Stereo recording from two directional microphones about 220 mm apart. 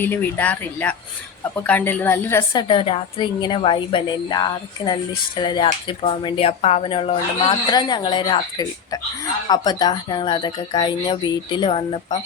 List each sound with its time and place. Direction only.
0.0 s speech: 10° left (ahead or behind)
2.5 s speech: 20° left (ahead or behind)